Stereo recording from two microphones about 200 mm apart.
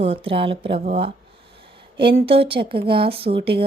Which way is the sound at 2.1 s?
30° right (ahead or behind).